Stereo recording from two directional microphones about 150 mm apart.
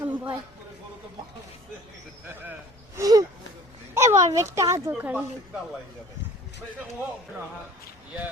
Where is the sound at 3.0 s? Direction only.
20° right (ahead or behind).